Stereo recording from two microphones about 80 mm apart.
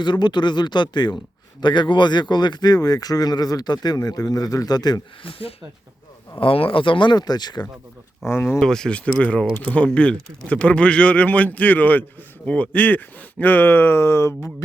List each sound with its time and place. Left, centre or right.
0.0 s speech: left
1.6 s speech: left
6.4 s speech: left
8.3 s speech: left
8.6 s speech: centre; by 14.5 s left